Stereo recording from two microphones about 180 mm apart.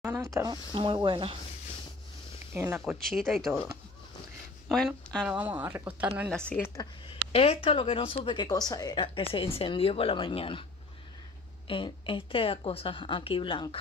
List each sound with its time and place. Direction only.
0.0 s speech: 10° right (ahead or behind); by 1.3 s 25° right (ahead or behind)
2.5 s speech: 15° right (ahead or behind)
3.1 s speech: centre (ahead or behind)
4.6 s speech: centre (ahead or behind)
6.3 s speech: 5° left (ahead or behind)
7.3 s speech: 30° left (ahead or behind)
11.6 s speech: 30° left (ahead or behind)